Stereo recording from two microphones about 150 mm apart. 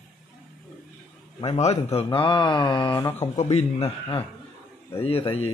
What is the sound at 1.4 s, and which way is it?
Speech, 45° left (ahead or behind).